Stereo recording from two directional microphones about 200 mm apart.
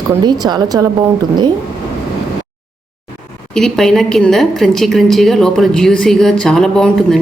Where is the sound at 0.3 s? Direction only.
20° right (ahead or behind).